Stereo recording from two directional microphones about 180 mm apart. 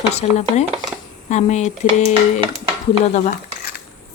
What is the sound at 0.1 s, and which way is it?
A woman's voice, 40° left (ahead or behind).